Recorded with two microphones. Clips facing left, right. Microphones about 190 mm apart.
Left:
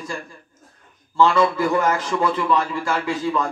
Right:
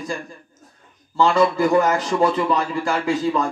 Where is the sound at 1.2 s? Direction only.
35° right (ahead or behind).